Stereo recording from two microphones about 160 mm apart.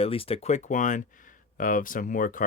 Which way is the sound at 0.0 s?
35° left (ahead or behind).